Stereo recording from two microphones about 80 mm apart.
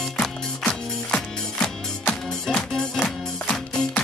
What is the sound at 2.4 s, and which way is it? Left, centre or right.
Music, centre.